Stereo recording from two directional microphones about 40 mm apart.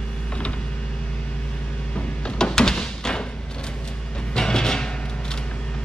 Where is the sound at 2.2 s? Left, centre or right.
Centre.